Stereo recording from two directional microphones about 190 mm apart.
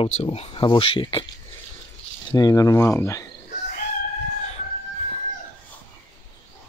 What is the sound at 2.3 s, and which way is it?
Speech, 20° left (ahead or behind).